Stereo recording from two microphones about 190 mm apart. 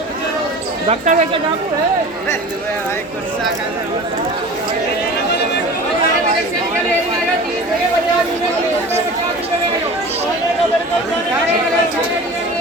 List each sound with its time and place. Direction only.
0.9 s speech: 40° right (ahead or behind)